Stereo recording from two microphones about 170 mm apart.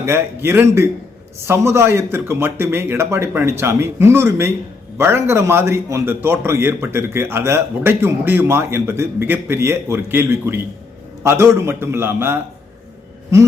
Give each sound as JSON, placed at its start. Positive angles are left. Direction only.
{"t": 0.0, "sound": "a man's voice", "side_deg": -15}
{"t": 13.3, "sound": "gasp", "side_deg": -20}